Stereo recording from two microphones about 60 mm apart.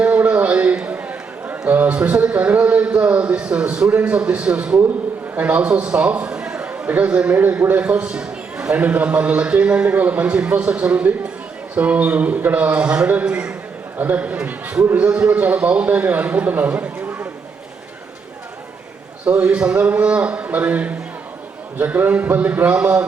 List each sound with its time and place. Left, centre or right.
0.0 s a sound: right
1.5 s a man's voice: right
5.4 s a man's voice: right
19.2 s a man's voice: right